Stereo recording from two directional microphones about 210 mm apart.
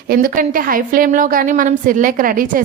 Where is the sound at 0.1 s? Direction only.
45° right (ahead or behind).